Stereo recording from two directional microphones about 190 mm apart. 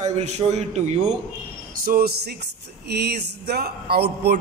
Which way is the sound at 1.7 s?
50° right (ahead or behind).